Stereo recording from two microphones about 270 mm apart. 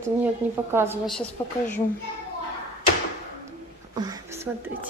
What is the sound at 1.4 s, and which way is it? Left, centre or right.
Speech, centre.